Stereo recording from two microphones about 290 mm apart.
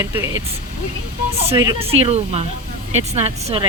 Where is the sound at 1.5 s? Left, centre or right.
Centre.